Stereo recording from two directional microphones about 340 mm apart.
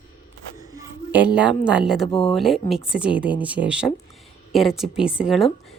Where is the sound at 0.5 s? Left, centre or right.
Centre.